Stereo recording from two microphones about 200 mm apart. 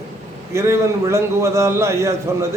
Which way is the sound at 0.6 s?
15° right (ahead or behind).